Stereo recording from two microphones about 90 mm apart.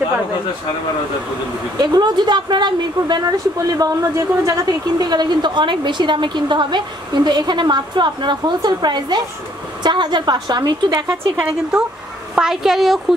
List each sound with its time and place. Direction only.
1.8 s speech: 50° right (ahead or behind)
12.4 s a woman's voice: 5° right (ahead or behind)